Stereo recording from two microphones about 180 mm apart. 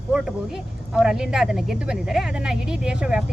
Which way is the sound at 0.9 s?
5° right (ahead or behind).